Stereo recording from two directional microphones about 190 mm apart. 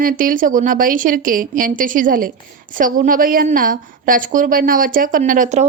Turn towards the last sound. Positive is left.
turn(degrees=-40)  # may be behind; listen again after turning